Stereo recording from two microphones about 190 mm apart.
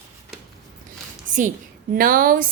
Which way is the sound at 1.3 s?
45° right (ahead or behind).